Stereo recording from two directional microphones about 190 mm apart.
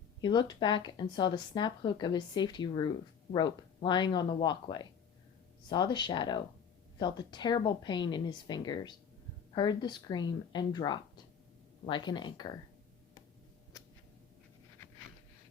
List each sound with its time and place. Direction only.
0.2 s speech: 25° left (ahead or behind)